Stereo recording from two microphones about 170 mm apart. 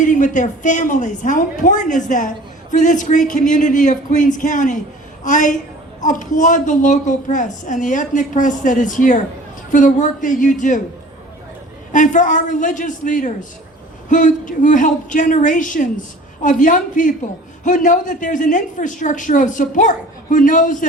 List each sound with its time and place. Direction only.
0.0 s a woman's voice: 50° left (ahead or behind)
11.9 s a woman's voice: 50° left (ahead or behind)